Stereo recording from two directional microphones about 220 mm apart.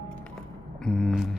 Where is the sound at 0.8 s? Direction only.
5° left (ahead or behind).